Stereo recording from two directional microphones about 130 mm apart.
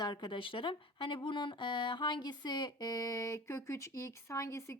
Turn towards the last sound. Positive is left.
turn(degrees=25)  # may be behind; listen again after turning